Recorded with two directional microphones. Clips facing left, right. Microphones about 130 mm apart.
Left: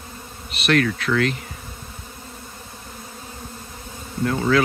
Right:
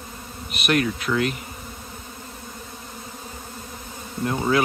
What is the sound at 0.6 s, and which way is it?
Bee, 10° right (ahead or behind).